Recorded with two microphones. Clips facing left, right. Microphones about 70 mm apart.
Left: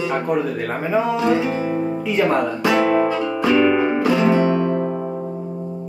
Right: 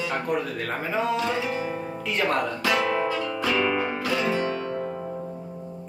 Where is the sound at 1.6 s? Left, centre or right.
Centre.